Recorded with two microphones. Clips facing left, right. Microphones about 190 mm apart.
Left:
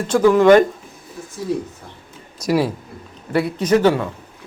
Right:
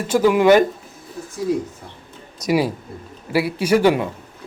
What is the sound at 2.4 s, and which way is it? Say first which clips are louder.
A man's voice: even; centre (ahead or behind).